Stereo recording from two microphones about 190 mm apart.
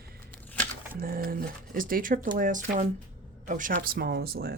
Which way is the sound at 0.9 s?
50° right (ahead or behind).